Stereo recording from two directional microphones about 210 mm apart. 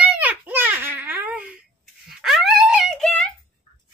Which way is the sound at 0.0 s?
5° right (ahead or behind).